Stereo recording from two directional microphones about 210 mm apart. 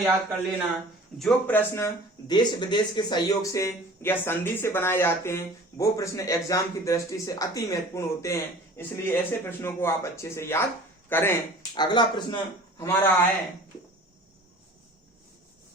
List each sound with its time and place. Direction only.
1.2 s a man's voice: 5° left (ahead or behind)
11.7 s a man's voice: 20° left (ahead or behind)